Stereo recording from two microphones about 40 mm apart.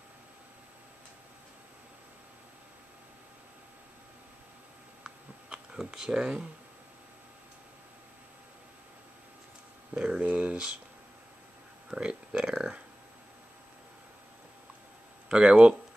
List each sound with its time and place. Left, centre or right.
5.0 s a sound: centre
9.9 s speech: right
11.9 s speech: centre
15.3 s speech: right